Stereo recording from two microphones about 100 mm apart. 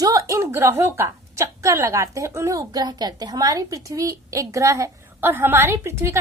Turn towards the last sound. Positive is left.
turn(degrees=-25)  # may be behind; listen again after turning